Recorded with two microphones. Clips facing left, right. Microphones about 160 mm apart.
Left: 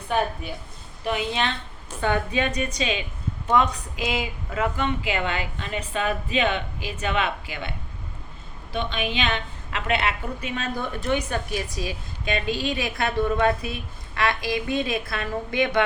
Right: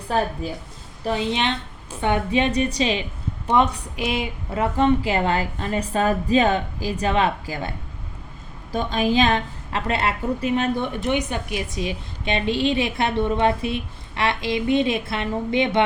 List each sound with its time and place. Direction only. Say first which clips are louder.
0.1 s a woman's voice: right 2 dB; 35° right (ahead or behind)